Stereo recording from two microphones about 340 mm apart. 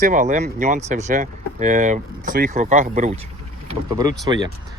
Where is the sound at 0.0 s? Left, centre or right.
Right.